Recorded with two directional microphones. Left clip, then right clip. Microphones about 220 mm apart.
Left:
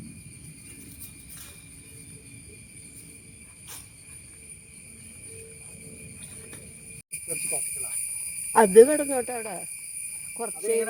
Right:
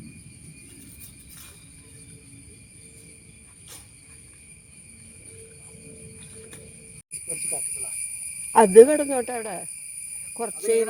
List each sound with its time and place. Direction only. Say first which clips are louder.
8.5 s speech: right 3 dB; 35° right (ahead or behind); by 10.8 s 55° right (ahead or behind)